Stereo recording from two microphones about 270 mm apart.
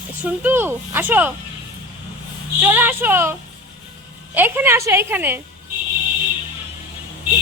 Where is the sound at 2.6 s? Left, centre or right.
Centre.